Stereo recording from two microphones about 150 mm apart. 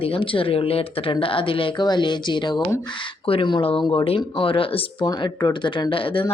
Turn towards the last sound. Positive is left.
turn(degrees=35)  # may be behind; listen again after turning